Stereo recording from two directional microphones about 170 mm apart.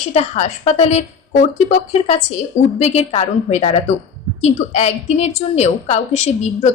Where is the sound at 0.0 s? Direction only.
40° left (ahead or behind).